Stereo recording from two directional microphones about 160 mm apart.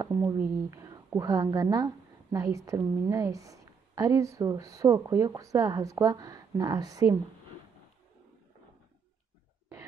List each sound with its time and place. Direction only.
0.0 s a woman's voice: 20° right (ahead or behind)